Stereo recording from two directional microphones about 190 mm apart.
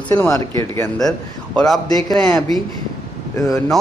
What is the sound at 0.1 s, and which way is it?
Speech, 15° left (ahead or behind).